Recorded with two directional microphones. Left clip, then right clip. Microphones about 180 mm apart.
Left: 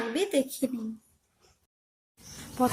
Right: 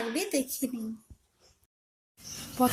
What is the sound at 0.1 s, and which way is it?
Speech, 50° left (ahead or behind).